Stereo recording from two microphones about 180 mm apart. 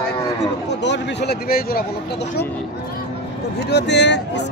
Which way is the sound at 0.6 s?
75° left (ahead or behind).